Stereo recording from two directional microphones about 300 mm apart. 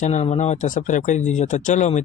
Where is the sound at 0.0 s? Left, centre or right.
Left.